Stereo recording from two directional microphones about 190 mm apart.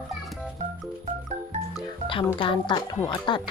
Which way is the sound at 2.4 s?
25° left (ahead or behind).